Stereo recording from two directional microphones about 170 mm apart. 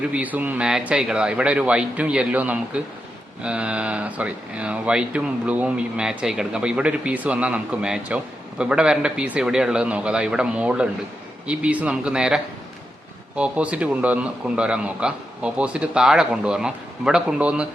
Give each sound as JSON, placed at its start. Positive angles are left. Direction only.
{"t": 0.1, "sound": "speech", "side_deg": -10}